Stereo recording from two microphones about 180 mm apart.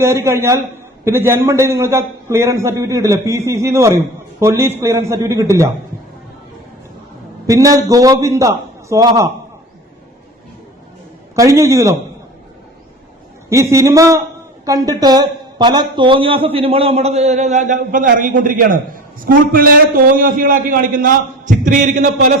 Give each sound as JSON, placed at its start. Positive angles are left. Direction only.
{"t": 0.0, "sound": "a man's voice", "side_deg": -15}
{"t": 7.4, "sound": "a man's voice", "side_deg": -20}
{"t": 11.3, "sound": "a man's voice", "side_deg": -15}
{"t": 13.5, "sound": "a man's voice", "side_deg": -15}